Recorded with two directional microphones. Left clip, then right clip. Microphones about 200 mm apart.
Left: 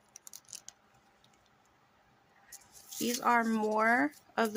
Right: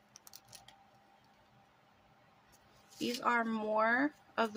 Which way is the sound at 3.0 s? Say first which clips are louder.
Left 4 dB; 35° left (ahead or behind).